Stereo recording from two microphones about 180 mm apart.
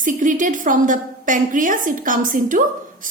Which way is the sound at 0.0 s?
45° right (ahead or behind).